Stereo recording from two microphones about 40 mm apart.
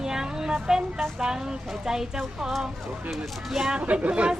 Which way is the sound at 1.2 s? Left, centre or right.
Centre.